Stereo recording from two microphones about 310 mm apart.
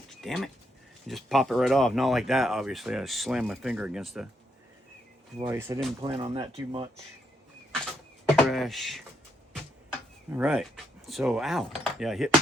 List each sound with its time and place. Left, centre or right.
0.2 s speech: centre
5.4 s speech: centre
8.4 s speech: centre
10.3 s speech: centre